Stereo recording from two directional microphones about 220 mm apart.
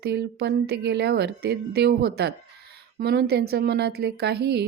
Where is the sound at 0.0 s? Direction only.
50° right (ahead or behind).